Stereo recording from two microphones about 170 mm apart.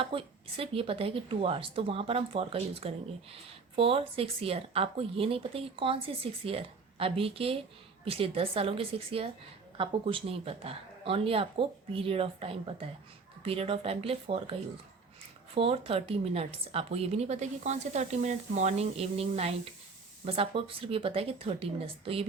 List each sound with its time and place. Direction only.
0.0 s a woman's voice: 35° right (ahead or behind)
15.5 s a woman's voice: 35° right (ahead or behind)